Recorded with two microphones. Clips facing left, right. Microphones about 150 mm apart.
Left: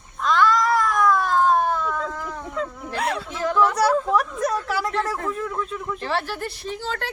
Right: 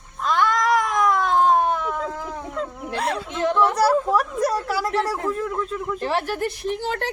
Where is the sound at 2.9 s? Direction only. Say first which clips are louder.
Even; centre (ahead or behind).